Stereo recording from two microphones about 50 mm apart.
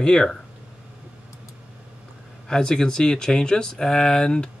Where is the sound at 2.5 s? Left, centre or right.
Centre.